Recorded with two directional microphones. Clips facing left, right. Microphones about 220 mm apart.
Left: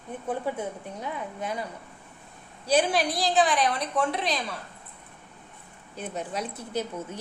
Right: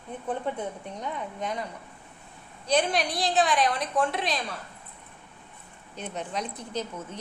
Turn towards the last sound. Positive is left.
turn(degrees=10)  # may be behind; listen again after turning